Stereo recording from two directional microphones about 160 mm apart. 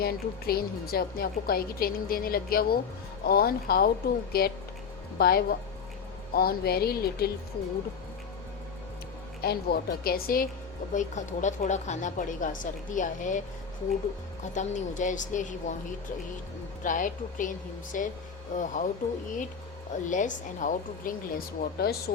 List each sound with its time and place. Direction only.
0.0 s a woman's voice: 75° left (ahead or behind)
9.4 s a woman's voice: 75° left (ahead or behind)
10.9 s a woman's voice: 50° left (ahead or behind)
14.5 s a woman's voice: 50° left (ahead or behind)
16.8 s a woman's voice: 55° left (ahead or behind)
20.1 s speech: 50° left (ahead or behind); by 22.1 s 75° left (ahead or behind)